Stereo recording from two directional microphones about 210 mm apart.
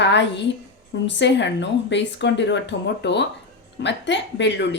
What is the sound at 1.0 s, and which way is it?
A woman's voice, 55° left (ahead or behind).